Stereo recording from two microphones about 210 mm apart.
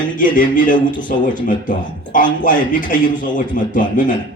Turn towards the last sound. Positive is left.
turn(degrees=40)  # may be behind; listen again after turning